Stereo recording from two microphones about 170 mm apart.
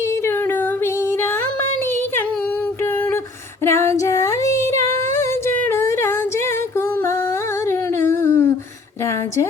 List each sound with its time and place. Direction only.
3.6 s female singing: 15° left (ahead or behind)
5.6 s music: 15° left (ahead or behind)
7.7 s a sound: 15° left (ahead or behind)